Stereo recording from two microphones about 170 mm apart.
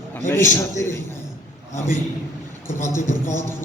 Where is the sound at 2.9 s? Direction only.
15° left (ahead or behind).